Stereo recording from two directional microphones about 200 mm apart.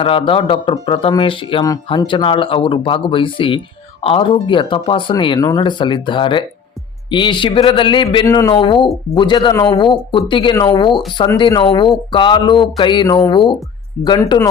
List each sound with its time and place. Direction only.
0.0 s speech: 25° left (ahead or behind)